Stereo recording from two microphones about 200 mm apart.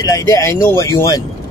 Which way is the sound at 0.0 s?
15° left (ahead or behind).